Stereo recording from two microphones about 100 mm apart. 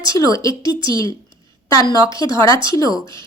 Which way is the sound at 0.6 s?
55° right (ahead or behind).